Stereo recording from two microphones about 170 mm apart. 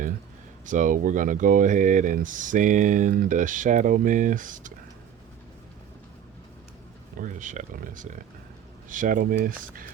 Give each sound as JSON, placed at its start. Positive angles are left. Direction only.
{"t": 0.6, "sound": "speech", "side_deg": -50}
{"t": 7.2, "sound": "speech", "side_deg": -50}